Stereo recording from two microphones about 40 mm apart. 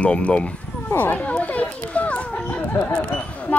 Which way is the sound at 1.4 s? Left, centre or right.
Left.